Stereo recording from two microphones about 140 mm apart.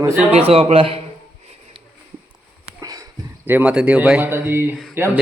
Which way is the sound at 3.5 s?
5° right (ahead or behind).